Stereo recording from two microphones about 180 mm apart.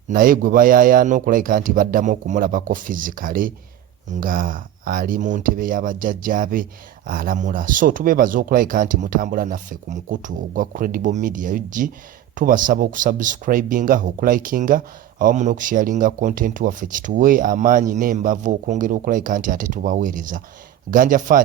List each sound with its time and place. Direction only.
0.1 s speech: 50° right (ahead or behind)